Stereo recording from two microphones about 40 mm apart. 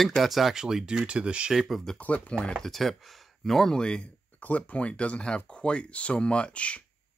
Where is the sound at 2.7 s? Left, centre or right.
Centre.